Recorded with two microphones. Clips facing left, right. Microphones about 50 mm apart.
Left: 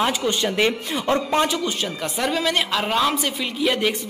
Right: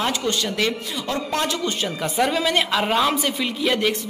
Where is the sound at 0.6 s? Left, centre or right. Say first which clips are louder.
Left 3 dB; left; by 3.9 s centre.